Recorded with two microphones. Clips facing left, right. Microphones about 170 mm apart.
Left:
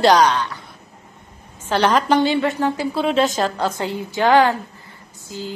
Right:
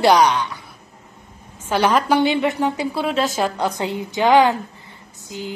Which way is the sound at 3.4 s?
15° right (ahead or behind).